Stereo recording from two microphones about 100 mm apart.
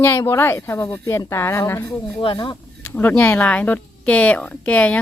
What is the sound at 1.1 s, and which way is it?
Speech, 30° left (ahead or behind).